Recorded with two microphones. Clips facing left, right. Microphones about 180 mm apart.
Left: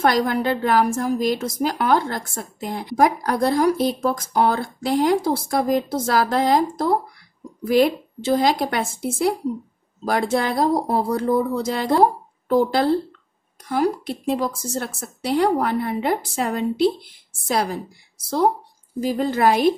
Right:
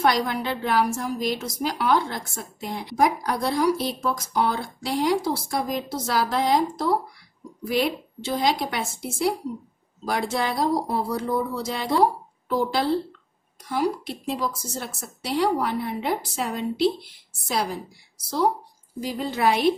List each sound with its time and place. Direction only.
0.0 s a woman's voice: 55° left (ahead or behind)
7.6 s a woman's voice: 50° left (ahead or behind)
10.0 s a woman's voice: 50° left (ahead or behind)
18.9 s a woman's voice: 50° left (ahead or behind)